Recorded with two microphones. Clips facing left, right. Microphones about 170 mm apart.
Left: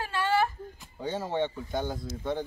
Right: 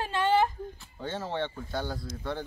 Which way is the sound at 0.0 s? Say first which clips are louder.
Right 2 dB; 20° right (ahead or behind).